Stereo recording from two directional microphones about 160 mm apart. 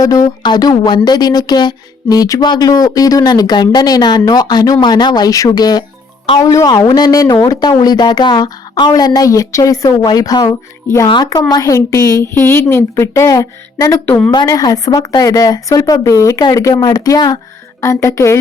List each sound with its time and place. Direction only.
0.0 s a woman's voice: 20° left (ahead or behind)